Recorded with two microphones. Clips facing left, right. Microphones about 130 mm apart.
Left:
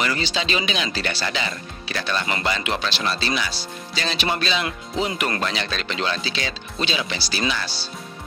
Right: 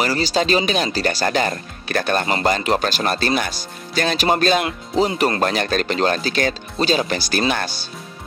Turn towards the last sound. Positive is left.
turn(degrees=-50)  # may be behind; listen again after turning